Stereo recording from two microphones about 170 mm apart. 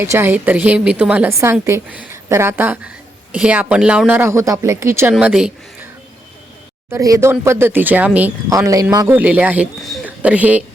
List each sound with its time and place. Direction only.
0.0 s speech: 15° right (ahead or behind)
5.1 s speech: 5° right (ahead or behind)
6.9 s speech: 20° right (ahead or behind)
8.5 s speech: 20° right (ahead or behind)
9.1 s speech: 10° right (ahead or behind)